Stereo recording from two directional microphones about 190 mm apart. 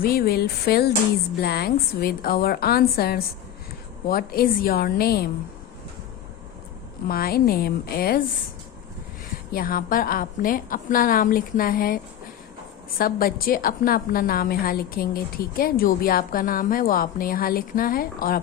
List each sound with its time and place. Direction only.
0.0 s a woman's voice: 50° left (ahead or behind)
7.1 s a woman's voice: 50° left (ahead or behind)
9.5 s a woman's voice: 50° left (ahead or behind)
13.0 s a woman's voice: 50° left (ahead or behind)